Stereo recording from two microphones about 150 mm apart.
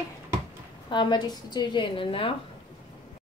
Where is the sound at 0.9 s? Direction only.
30° left (ahead or behind).